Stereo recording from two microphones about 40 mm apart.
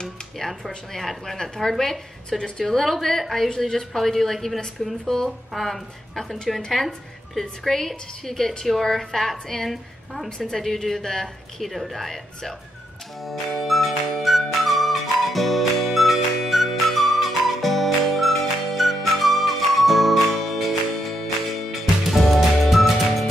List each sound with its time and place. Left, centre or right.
0.4 s a woman's voice: centre
2.2 s a woman's voice: left
2.6 s a woman's voice: centre
13.2 s flute: centre
22.1 s music: centre